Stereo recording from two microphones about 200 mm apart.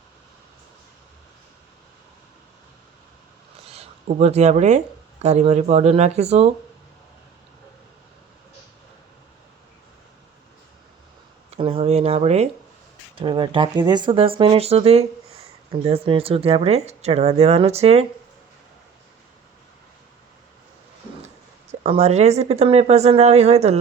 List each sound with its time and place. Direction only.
3.7 s speech: 30° right (ahead or behind)
11.5 s a sound: 30° right (ahead or behind)
13.1 s speech: 25° right (ahead or behind)
21.7 s speech: 30° right (ahead or behind)